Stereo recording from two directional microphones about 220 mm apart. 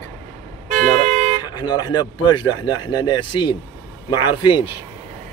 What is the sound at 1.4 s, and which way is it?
Speech, 20° left (ahead or behind).